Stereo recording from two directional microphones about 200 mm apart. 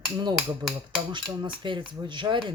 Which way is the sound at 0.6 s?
20° right (ahead or behind).